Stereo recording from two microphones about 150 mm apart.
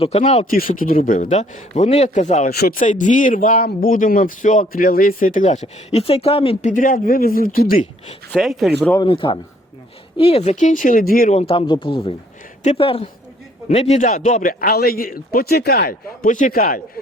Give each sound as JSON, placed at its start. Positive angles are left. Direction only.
{"t": 0.0, "sound": "speech", "side_deg": 45}
{"t": 0.6, "sound": "speech", "side_deg": 70}
{"t": 2.5, "sound": "speech", "side_deg": 85}
{"t": 6.7, "sound": "a man's voice", "side_deg": 60}
{"t": 8.3, "sound": "speech", "side_deg": 0}
{"t": 9.0, "sound": "speech", "side_deg": 35}
{"t": 10.5, "sound": "speech", "side_deg": 55}
{"t": 11.3, "sound": "speech", "side_deg": 35}
{"t": 13.7, "sound": "a man's voice", "side_deg": 50}